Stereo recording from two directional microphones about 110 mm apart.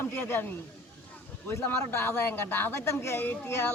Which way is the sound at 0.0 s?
20° left (ahead or behind).